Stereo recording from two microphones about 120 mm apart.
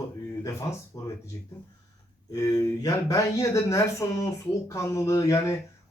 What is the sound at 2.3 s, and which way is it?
Speech, 30° left (ahead or behind).